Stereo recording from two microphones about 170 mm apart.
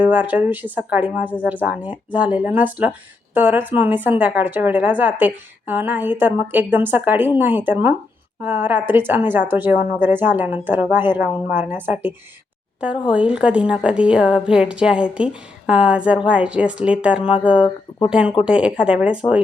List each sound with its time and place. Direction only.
0.0 s a woman's voice: 10° right (ahead or behind)